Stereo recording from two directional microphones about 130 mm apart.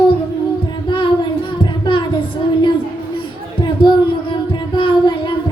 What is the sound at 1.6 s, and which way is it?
Child singing, 40° left (ahead or behind).